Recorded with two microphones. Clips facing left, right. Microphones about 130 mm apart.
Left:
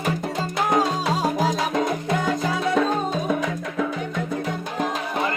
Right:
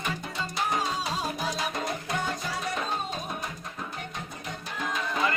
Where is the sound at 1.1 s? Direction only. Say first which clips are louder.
Left 9 dB; 90° left.